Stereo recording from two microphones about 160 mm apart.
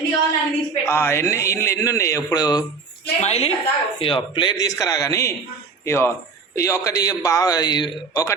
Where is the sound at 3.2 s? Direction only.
40° left (ahead or behind).